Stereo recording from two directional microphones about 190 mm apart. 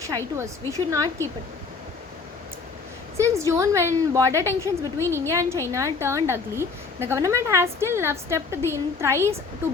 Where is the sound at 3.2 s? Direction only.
15° right (ahead or behind).